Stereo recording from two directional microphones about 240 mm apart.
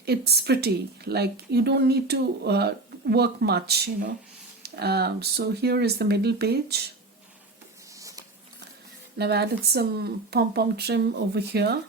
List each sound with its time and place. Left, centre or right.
0.0 s a woman's voice: right
7.9 s a sound: centre
9.1 s a woman's voice: right